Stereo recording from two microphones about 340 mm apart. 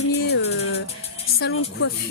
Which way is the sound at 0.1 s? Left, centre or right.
Left.